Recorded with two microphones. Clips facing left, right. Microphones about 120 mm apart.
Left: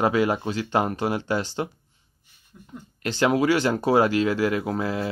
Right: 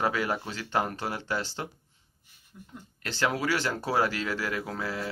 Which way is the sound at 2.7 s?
15° left (ahead or behind).